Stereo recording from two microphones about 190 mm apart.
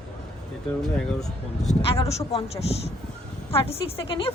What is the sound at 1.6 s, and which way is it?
A man's voice, 30° left (ahead or behind).